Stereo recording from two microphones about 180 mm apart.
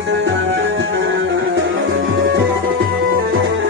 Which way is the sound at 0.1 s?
85° right.